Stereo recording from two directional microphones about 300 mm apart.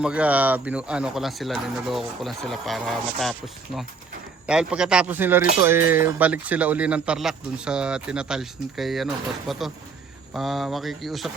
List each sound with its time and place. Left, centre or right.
0.0 s a man's voice: centre
4.4 s a man's voice: centre